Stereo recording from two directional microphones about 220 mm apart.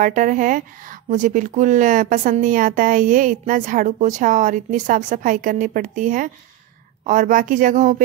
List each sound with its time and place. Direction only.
0.0 s speech: 35° right (ahead or behind)